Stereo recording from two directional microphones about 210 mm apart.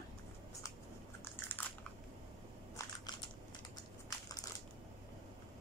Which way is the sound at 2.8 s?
15° left (ahead or behind).